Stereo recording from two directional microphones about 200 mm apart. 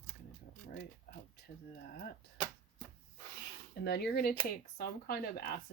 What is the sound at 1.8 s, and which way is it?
Speech, 50° left (ahead or behind).